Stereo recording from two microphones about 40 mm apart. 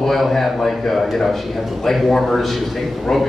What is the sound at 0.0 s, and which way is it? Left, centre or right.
A man's voice, centre.